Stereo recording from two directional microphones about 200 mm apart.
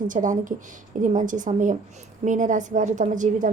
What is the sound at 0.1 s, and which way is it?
Speech, 40° right (ahead or behind).